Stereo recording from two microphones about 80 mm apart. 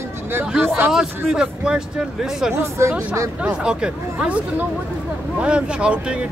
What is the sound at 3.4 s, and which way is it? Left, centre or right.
Speech, centre.